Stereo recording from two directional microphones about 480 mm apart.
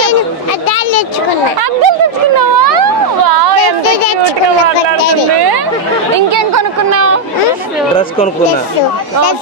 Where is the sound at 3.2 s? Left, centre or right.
Right.